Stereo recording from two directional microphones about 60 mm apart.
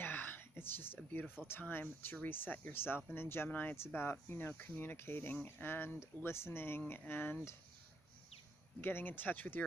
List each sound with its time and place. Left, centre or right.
0.0 s a sound: left
1.4 s speech: centre
1.7 s speech: left
3.5 s speech: left
4.4 s speech: left
8.8 s speech: left